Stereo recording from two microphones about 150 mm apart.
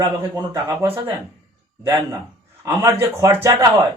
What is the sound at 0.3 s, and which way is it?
Speech, 20° right (ahead or behind).